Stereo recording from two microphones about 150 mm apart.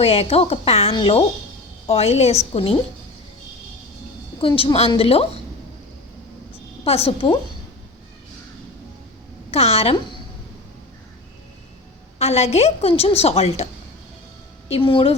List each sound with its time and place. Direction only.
0.0 s a woman's voice: 40° left (ahead or behind)
4.4 s a woman's voice: 35° left (ahead or behind)
6.8 s a woman's voice: 40° left (ahead or behind)
9.5 s a woman's voice: 45° left (ahead or behind)
12.2 s a woman's voice: 45° left (ahead or behind)
14.7 s a woman's voice: 35° left (ahead or behind)